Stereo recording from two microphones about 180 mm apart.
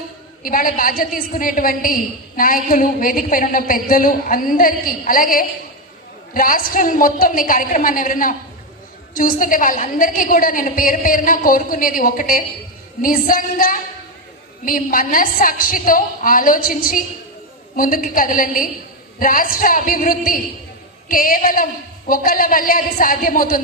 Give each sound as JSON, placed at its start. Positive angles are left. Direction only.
{"t": 0.4, "sound": "a woman's voice", "side_deg": 50}